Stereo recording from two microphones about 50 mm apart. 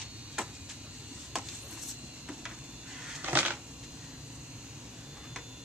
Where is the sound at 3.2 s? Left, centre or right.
Right.